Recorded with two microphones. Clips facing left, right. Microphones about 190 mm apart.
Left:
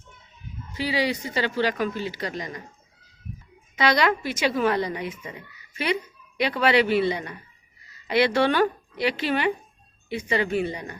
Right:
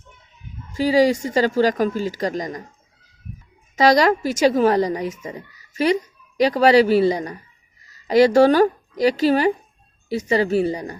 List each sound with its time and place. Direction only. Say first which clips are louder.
0.8 s speech: right 9 dB; 45° right (ahead or behind)
3.8 s a woman's voice: right 6 dB; 40° right (ahead or behind)